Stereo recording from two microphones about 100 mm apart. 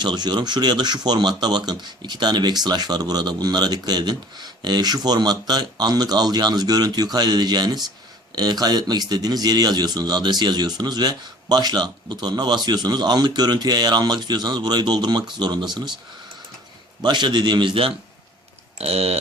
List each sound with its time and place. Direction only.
0.0 s speech: 45° right (ahead or behind)
17.0 s speech: 50° right (ahead or behind)
18.8 s speech: 90° right